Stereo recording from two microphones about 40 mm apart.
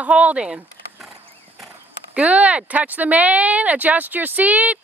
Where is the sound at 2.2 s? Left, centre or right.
Right.